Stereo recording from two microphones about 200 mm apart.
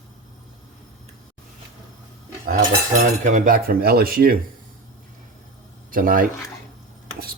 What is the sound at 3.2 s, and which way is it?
Speech, 40° right (ahead or behind).